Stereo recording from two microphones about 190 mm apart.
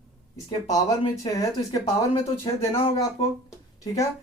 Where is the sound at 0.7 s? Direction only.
20° left (ahead or behind).